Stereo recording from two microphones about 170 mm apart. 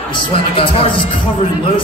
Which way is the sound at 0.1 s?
30° left (ahead or behind).